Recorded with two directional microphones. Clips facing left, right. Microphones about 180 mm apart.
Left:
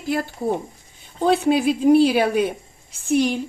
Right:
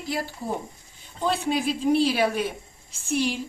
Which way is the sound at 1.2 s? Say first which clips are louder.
Left 7 dB; 65° left (ahead or behind).